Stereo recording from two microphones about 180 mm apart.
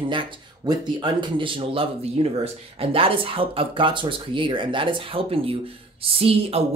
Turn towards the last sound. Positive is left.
turn(degrees=-35)  # may be behind; listen again after turning